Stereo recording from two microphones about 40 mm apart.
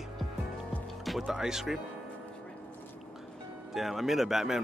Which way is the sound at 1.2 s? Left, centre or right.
Centre.